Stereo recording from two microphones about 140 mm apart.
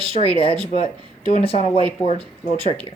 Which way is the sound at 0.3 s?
40° left (ahead or behind).